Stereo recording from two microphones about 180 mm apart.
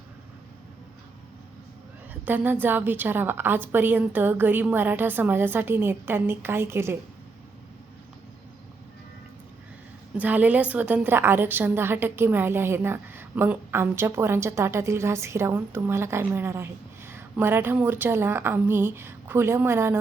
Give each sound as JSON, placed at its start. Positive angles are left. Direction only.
{"t": 2.2, "sound": "a woman's voice", "side_deg": -10}
{"t": 10.2, "sound": "a woman's voice", "side_deg": -10}